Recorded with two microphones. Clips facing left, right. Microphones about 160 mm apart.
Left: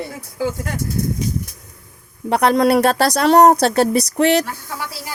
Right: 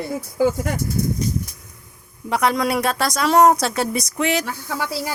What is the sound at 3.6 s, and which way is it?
Speech, 65° left (ahead or behind).